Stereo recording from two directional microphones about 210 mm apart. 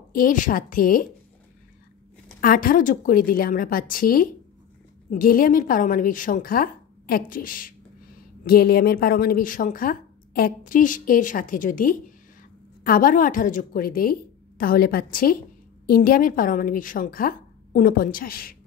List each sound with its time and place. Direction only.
0.1 s speech: 40° left (ahead or behind)
2.4 s a woman's voice: 40° left (ahead or behind)